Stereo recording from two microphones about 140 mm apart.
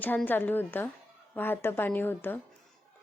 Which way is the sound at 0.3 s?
15° left (ahead or behind).